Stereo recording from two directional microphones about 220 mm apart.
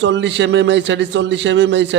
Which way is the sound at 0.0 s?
55° right (ahead or behind).